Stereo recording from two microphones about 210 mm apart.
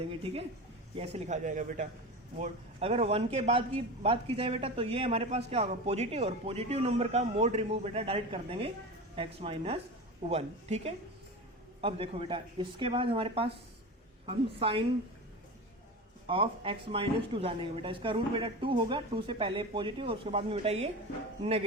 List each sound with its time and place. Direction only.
0.1 s a man's voice: 25° right (ahead or behind)
16.2 s a man's voice: 25° right (ahead or behind)